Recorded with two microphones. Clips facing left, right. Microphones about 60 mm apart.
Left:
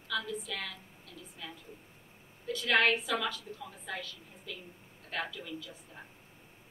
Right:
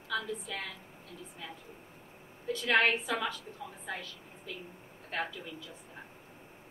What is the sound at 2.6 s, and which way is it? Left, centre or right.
A woman's voice, right.